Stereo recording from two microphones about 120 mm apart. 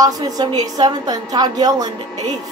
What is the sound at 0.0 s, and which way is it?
A woman's voice, 35° right (ahead or behind).